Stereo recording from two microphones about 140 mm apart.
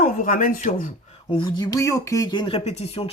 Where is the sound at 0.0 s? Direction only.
70° left (ahead or behind).